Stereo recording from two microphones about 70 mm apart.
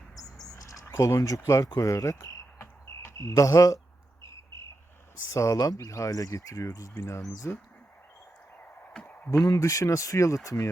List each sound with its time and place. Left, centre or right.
0.4 s a sound: left
0.9 s speech: left
2.6 s insect: left
3.2 s speech: left
4.2 s cricket: left
5.3 s speech: left
9.4 s speech: left